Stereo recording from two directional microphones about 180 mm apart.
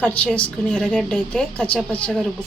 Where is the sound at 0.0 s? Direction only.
10° left (ahead or behind).